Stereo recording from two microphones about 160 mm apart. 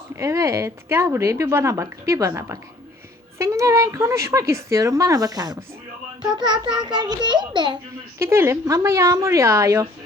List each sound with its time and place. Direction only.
0.2 s speech: 20° right (ahead or behind)
8.2 s speech: 15° right (ahead or behind)